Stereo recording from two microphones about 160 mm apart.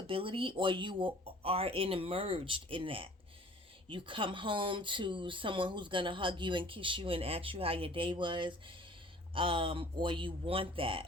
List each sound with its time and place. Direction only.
0.1 s speech: 35° right (ahead or behind)